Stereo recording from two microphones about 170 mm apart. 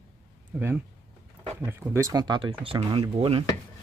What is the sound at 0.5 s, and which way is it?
Speech, 10° right (ahead or behind).